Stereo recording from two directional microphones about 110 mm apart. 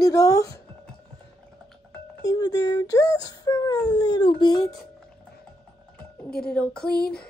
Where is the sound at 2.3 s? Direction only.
35° left (ahead or behind).